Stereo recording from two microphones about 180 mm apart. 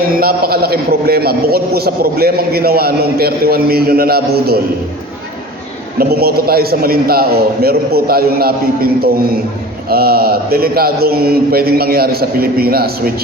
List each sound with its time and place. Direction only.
0.2 s a man's voice: 55° right (ahead or behind)
6.0 s a man's voice: 60° right (ahead or behind)